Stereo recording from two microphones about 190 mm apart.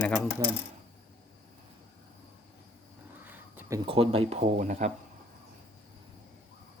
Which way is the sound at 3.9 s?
30° right (ahead or behind).